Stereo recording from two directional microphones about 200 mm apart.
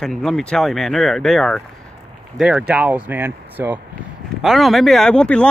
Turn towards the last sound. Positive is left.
turn(degrees=5)  # may be behind; listen again after turning